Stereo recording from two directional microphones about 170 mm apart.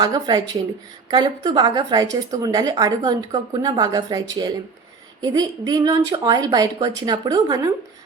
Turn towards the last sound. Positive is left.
turn(degrees=-25)  # may be behind; listen again after turning